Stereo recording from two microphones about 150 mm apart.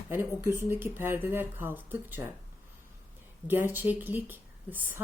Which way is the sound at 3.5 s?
15° right (ahead or behind).